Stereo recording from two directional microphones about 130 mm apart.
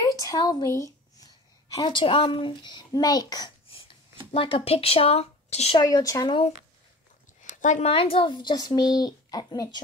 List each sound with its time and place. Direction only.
0.2 s a woman's voice: 30° left (ahead or behind)
1.8 s speech: 40° left (ahead or behind)
3.6 s a sound: 45° left (ahead or behind)
4.3 s a woman's voice: 45° left (ahead or behind)
5.8 s speech: 30° left (ahead or behind)
7.4 s a sound: 70° left (ahead or behind)
7.9 s speech: 45° left (ahead or behind)